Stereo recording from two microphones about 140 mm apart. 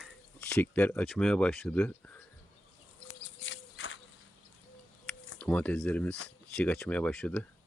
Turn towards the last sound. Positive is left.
turn(degrees=10)  # may be behind; listen again after turning